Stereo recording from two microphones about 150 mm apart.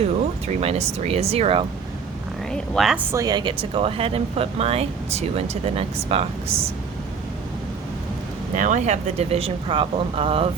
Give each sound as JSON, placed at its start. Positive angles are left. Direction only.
{"t": 0.0, "sound": "speech", "side_deg": -45}
{"t": 2.5, "sound": "speech", "side_deg": 5}
{"t": 3.0, "sound": "speech", "side_deg": -20}
{"t": 8.5, "sound": "speech", "side_deg": -55}